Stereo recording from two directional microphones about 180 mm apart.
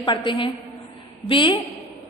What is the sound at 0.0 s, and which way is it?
A woman's voice, 25° left (ahead or behind).